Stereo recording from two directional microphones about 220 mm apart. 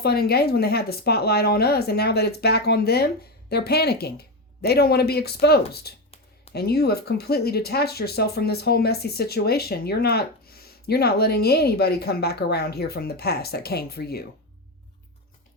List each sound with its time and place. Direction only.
0.0 s speech: 45° left (ahead or behind)